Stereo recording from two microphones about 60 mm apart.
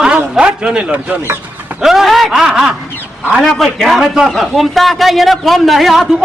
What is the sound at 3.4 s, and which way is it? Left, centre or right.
A man's voice, centre.